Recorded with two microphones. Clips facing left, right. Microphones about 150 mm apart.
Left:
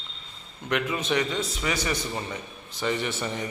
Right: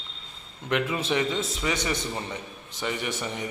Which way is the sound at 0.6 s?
25° right (ahead or behind).